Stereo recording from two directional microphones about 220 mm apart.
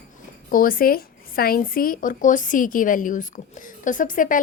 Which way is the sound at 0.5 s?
40° left (ahead or behind).